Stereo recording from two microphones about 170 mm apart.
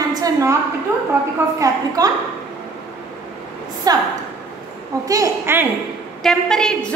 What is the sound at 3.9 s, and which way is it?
Speech, 20° right (ahead or behind).